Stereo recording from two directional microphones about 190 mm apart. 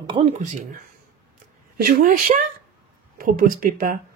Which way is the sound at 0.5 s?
45° right (ahead or behind).